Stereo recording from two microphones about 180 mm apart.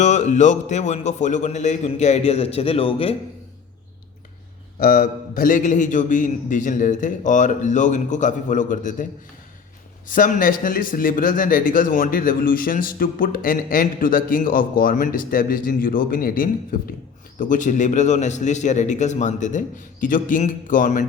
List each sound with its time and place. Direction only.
0.0 s a man's voice: 40° left (ahead or behind)
4.8 s speech: 50° left (ahead or behind)
10.1 s speech: 50° left (ahead or behind)